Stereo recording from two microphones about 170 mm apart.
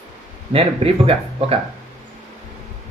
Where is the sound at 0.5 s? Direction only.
35° right (ahead or behind).